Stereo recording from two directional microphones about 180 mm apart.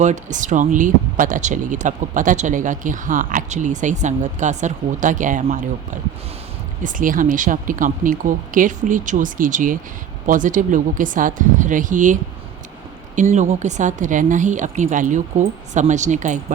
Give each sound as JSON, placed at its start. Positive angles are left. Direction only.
{"t": 0.0, "sound": "speech", "side_deg": -45}
{"t": 13.1, "sound": "speech", "side_deg": -45}